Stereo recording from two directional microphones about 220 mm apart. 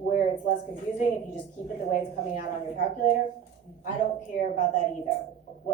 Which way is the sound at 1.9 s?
35° left (ahead or behind).